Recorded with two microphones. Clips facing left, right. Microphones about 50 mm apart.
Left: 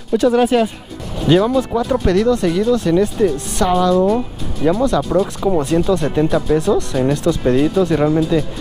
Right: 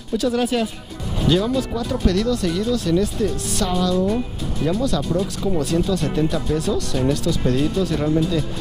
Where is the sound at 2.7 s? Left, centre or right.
Left.